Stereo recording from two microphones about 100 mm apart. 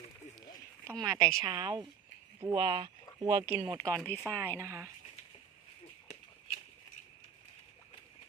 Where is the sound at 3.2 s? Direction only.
45° right (ahead or behind).